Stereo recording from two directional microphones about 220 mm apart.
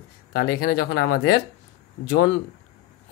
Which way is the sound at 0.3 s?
40° left (ahead or behind).